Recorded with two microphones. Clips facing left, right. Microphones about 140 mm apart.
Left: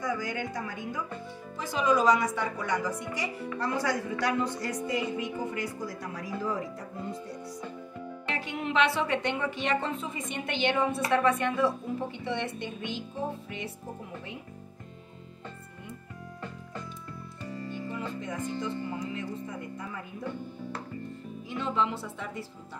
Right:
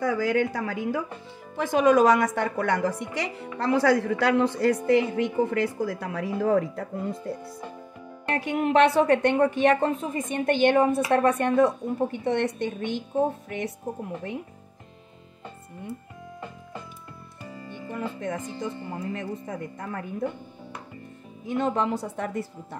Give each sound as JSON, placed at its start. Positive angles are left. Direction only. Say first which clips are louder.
{"t": 0.0, "sound": "a woman's voice", "louder": "right 9 dB", "side_deg": -75}
{"t": 1.6, "sound": "a woman's voice", "louder": "right 7 dB", "side_deg": -55}
{"t": 3.5, "sound": "a woman's voice", "louder": "right 9 dB", "side_deg": -80}
{"t": 17.6, "sound": "music", "louder": "right 4 dB", "side_deg": -55}
{"t": 18.9, "sound": "a woman's voice", "louder": "right 3 dB", "side_deg": -50}
{"t": 21.5, "sound": "a woman's voice", "louder": "right 5 dB", "side_deg": -50}